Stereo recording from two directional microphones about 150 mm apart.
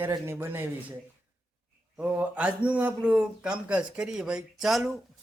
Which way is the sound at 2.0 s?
10° right (ahead or behind).